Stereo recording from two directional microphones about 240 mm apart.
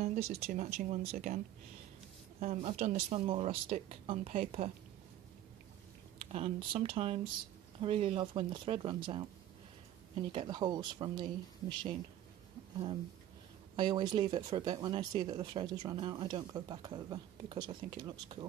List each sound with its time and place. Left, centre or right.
0.0 s a sound: right
0.3 s speech: right
2.4 s speech: right
6.1 s speech: right
13.7 s speech: centre